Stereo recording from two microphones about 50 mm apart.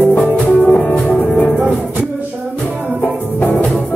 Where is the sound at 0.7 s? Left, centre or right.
Left.